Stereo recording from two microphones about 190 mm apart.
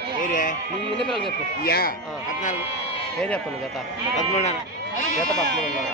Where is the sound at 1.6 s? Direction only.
50° left (ahead or behind).